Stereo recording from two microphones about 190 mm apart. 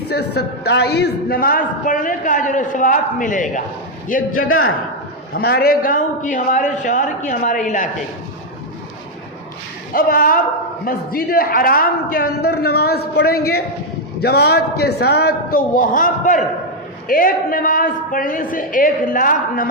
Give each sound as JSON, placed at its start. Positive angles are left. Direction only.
{"t": 0.1, "sound": "a woman's voice", "side_deg": 60}
{"t": 4.4, "sound": "a man's voice", "side_deg": 90}
{"t": 5.3, "sound": "a woman's voice", "side_deg": 55}
{"t": 9.9, "sound": "a woman's voice", "side_deg": 50}